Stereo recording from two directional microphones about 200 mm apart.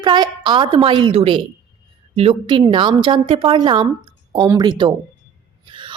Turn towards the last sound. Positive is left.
turn(degrees=-25)  # may be behind; listen again after turning